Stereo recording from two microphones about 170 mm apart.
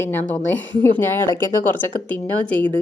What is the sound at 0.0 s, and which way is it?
Speech, 10° left (ahead or behind).